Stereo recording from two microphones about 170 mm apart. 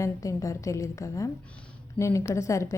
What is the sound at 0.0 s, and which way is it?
A woman's voice, 20° left (ahead or behind).